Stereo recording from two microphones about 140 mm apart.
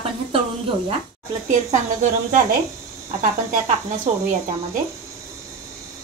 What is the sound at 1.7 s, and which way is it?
Speech, 60° right (ahead or behind).